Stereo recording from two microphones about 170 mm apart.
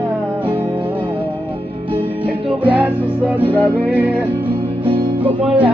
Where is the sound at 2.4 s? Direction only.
10° right (ahead or behind).